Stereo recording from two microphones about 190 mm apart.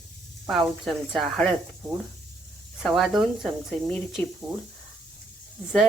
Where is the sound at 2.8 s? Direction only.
Centre (ahead or behind).